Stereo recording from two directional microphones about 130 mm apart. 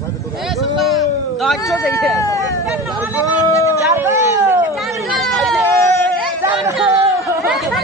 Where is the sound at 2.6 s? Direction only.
5° right (ahead or behind).